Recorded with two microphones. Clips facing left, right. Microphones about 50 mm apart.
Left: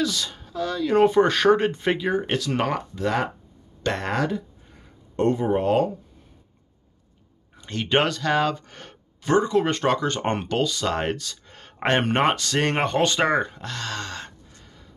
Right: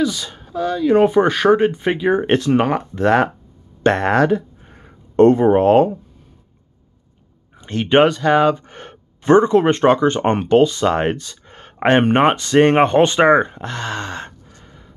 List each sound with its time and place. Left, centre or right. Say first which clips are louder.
0.0 s speech: right 5 dB; centre
2.1 s speech: right 8 dB; right
2.5 s speech: right 6 dB; centre
2.9 s speech: right 9 dB; right
7.5 s speech: right 8 dB; right